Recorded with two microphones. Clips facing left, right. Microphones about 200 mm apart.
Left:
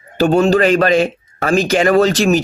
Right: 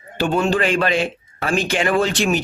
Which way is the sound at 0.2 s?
40° left (ahead or behind).